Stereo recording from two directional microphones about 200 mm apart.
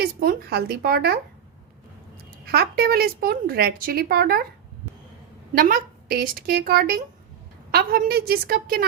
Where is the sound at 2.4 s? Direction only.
50° right (ahead or behind).